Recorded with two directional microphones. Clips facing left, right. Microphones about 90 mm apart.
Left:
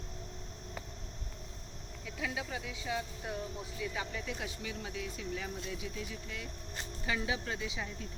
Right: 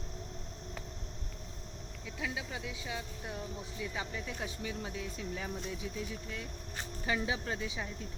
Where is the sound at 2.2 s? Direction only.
20° right (ahead or behind).